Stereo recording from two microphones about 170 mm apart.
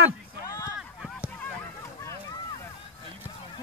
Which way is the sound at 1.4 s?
15° left (ahead or behind).